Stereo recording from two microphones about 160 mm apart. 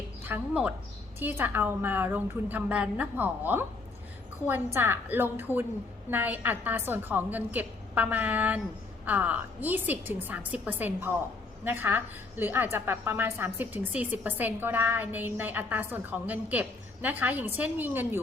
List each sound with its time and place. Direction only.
0.3 s a woman's voice: 10° right (ahead or behind)